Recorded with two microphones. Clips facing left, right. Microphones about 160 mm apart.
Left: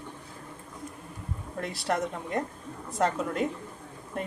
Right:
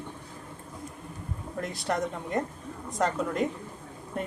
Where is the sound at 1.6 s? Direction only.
Centre (ahead or behind).